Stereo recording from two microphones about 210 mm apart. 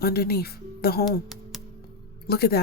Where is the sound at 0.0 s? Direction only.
50° left (ahead or behind).